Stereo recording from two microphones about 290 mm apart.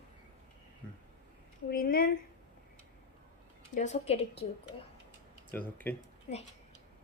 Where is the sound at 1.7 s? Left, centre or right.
Left.